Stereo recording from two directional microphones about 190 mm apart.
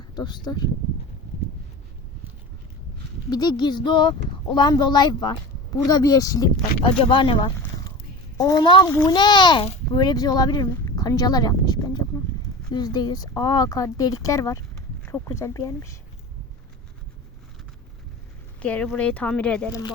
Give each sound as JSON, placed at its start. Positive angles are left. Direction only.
{"t": 0.2, "sound": "speech", "side_deg": 25}
{"t": 3.2, "sound": "speech", "side_deg": 20}
{"t": 6.6, "sound": "speech", "side_deg": 30}
{"t": 18.6, "sound": "speech", "side_deg": 5}